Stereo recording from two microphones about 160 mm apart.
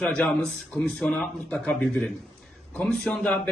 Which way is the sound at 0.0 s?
5° left (ahead or behind).